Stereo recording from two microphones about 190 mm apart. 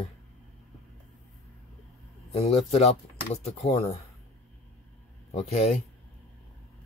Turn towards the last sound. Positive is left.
turn(degrees=30)  # may be behind; listen again after turning